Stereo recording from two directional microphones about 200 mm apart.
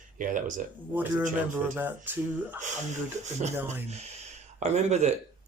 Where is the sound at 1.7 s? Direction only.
10° right (ahead or behind).